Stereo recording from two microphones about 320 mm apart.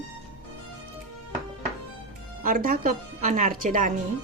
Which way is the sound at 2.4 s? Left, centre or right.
Right.